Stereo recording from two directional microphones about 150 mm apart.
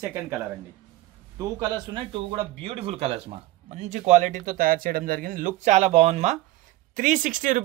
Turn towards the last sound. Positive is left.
turn(degrees=-60)  # may be behind; listen again after turning